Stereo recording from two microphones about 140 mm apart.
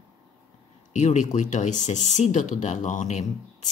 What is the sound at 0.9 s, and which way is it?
Speech, 60° left (ahead or behind).